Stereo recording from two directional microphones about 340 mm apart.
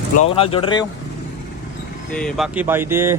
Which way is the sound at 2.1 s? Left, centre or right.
Centre.